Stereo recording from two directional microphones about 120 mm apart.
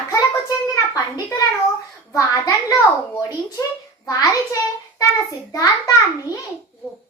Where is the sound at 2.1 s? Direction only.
30° left (ahead or behind).